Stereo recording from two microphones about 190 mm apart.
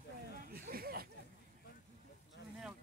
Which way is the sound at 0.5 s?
55° right (ahead or behind).